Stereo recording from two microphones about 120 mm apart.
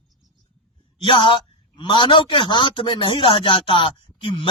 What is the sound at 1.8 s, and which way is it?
A man's voice, 40° left (ahead or behind).